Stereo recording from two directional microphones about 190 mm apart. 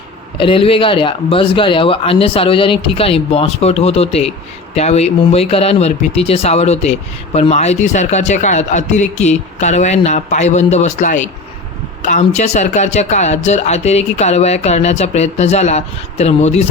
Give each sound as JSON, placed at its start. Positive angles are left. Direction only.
{"t": 0.3, "sound": "speech", "side_deg": 30}